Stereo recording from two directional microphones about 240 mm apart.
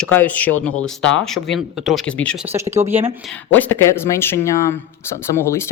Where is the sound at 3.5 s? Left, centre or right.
Centre.